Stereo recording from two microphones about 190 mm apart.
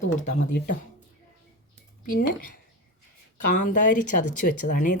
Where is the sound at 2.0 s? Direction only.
50° left (ahead or behind).